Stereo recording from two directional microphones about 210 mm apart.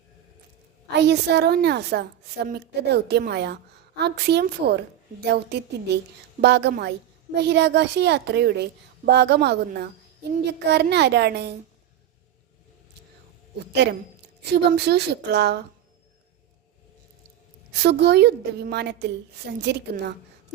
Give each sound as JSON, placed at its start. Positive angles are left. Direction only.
{"t": 0.9, "sound": "a woman's voice", "side_deg": -50}
{"t": 13.8, "sound": "a woman's voice", "side_deg": -50}
{"t": 17.7, "sound": "a woman's voice", "side_deg": -50}